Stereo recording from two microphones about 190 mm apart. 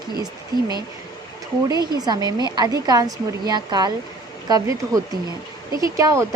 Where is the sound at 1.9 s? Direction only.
20° right (ahead or behind).